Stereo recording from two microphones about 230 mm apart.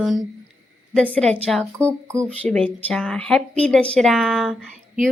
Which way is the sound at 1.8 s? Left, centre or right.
Centre.